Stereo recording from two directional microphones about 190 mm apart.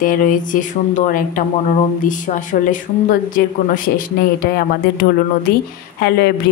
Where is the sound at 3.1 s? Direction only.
50° left (ahead or behind).